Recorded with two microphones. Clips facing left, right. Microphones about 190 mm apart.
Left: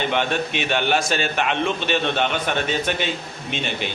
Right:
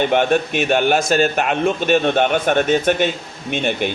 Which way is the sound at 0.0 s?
50° right (ahead or behind).